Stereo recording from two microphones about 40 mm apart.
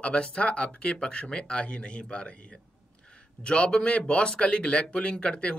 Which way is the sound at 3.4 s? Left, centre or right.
Left.